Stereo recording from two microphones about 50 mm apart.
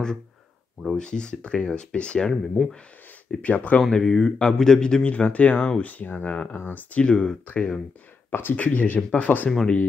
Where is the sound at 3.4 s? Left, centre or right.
Left.